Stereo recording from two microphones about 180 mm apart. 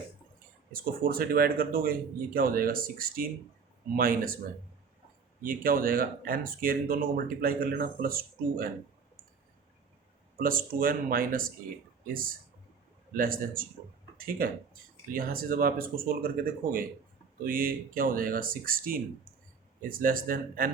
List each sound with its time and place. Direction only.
0.7 s speech: 50° right (ahead or behind)
5.4 s speech: 50° right (ahead or behind)
10.3 s speech: 50° right (ahead or behind)
13.1 s speech: 50° right (ahead or behind)